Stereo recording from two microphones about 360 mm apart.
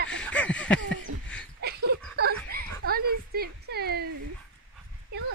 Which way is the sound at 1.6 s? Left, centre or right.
Right.